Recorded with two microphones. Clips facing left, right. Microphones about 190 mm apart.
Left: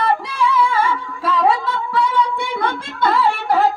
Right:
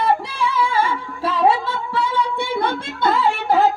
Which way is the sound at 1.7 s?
25° right (ahead or behind).